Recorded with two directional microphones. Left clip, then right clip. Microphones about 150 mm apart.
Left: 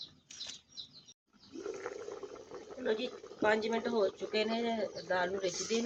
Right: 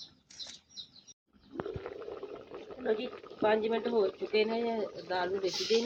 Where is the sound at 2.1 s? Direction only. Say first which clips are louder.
Right 2 dB; 25° right (ahead or behind).